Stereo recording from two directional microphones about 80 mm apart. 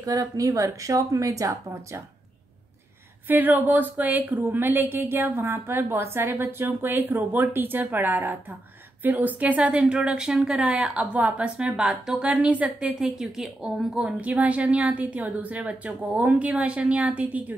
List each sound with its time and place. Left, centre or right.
0.0 s speech: right
3.3 s a woman's voice: right